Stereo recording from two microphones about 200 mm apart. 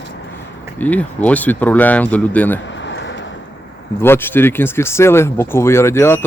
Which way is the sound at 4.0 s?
10° left (ahead or behind).